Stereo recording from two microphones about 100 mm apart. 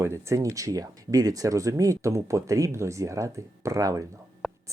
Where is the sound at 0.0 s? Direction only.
30° right (ahead or behind).